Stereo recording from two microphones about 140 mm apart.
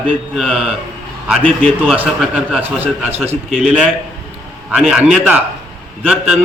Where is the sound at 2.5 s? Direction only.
15° right (ahead or behind).